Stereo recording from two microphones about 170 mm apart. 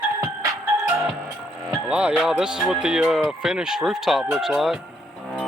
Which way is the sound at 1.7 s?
5° right (ahead or behind).